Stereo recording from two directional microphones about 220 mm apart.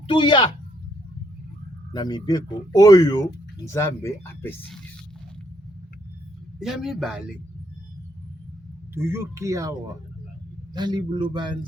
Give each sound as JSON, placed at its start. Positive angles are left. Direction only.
{"t": 0.1, "sound": "speech", "side_deg": 20}
{"t": 1.9, "sound": "speech", "side_deg": 20}
{"t": 6.6, "sound": "a man's voice", "side_deg": 0}
{"t": 9.0, "sound": "speech", "side_deg": -10}
{"t": 10.8, "sound": "a man's voice", "side_deg": -20}